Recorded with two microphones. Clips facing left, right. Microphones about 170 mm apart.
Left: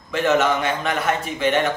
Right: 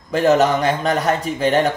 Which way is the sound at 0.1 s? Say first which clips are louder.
Right 4 dB; 35° right (ahead or behind).